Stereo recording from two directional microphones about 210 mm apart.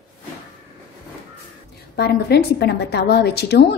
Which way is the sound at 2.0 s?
50° left (ahead or behind).